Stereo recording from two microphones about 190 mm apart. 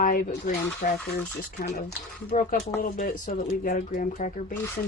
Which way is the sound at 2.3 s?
45° left (ahead or behind).